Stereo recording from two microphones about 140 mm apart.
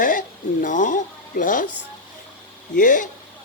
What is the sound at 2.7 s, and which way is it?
Speech, 70° left (ahead or behind).